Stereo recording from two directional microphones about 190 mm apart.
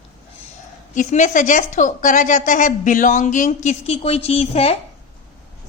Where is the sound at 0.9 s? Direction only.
40° left (ahead or behind).